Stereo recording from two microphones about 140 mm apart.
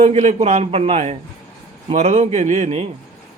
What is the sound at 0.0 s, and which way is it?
A man's voice, 50° right (ahead or behind).